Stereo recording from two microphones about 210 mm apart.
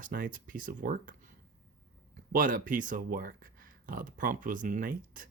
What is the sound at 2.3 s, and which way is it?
Speech, 40° right (ahead or behind).